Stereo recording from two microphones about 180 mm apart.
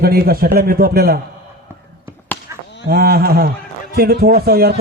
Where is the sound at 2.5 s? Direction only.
15° right (ahead or behind).